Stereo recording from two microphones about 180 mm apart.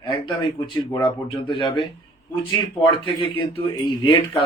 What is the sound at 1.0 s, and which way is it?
Speech, 25° left (ahead or behind).